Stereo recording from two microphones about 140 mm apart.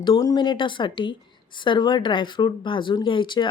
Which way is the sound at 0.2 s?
30° left (ahead or behind).